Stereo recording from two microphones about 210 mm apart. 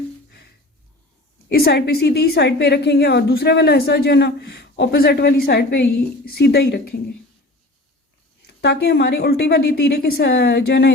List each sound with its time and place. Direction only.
1.5 s a woman's voice: 50° left (ahead or behind)
8.6 s a woman's voice: 50° left (ahead or behind)